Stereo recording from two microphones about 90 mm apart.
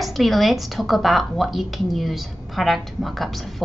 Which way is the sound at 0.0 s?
Centre (ahead or behind).